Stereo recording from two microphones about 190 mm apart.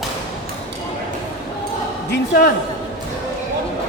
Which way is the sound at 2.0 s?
55° left (ahead or behind).